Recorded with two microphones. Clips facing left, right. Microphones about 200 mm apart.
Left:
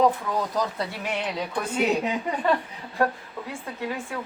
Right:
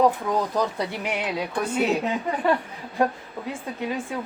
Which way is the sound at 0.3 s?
20° right (ahead or behind).